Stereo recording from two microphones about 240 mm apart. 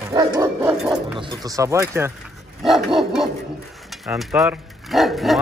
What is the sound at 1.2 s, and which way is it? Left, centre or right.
Speech, centre.